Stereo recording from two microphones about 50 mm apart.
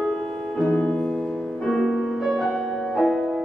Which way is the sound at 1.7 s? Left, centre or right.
Centre.